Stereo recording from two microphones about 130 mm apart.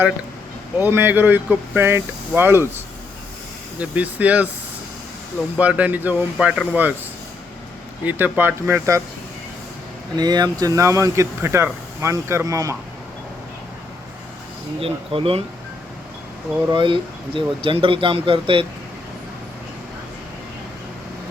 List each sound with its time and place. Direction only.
0.8 s speech: 15° right (ahead or behind)
3.8 s speech: 10° right (ahead or behind)
5.5 s speech: 10° right (ahead or behind)
8.0 s speech: 15° right (ahead or behind)
10.2 s speech: 30° right (ahead or behind)
14.8 s speech: 45° right (ahead or behind)
16.7 s speech: 40° right (ahead or behind)